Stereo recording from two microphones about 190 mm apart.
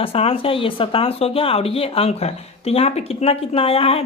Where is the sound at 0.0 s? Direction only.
30° left (ahead or behind).